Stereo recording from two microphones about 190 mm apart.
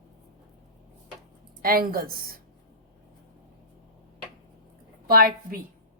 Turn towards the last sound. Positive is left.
turn(degrees=-50)  # may be behind; listen again after turning